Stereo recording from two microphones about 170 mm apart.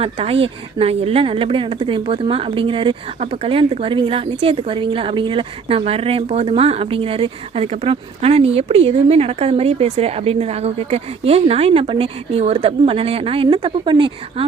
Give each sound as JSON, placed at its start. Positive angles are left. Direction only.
{"t": 0.0, "sound": "speech", "side_deg": -35}